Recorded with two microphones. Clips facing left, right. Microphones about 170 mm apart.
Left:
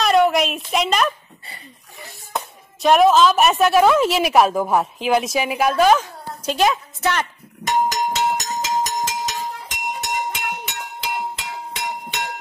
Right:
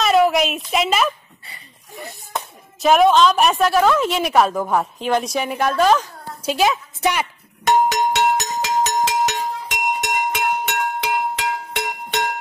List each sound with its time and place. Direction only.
0.0 s a sound: centre (ahead or behind)
2.3 s speech: centre (ahead or behind)
7.6 s music: 70° right (ahead or behind)